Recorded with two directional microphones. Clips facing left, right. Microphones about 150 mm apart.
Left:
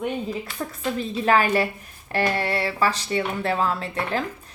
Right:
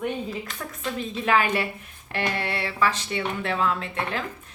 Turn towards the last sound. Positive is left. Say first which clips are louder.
# left 3 dB
turn(degrees=35)  # may be behind; listen again after turning